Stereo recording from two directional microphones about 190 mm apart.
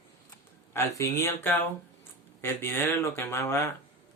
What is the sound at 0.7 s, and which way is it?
A man's voice, 15° left (ahead or behind).